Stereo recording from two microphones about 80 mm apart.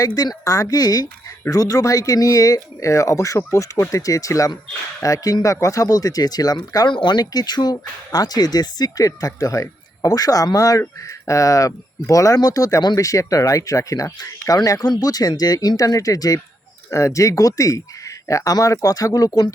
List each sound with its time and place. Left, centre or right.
0.0 s speech: left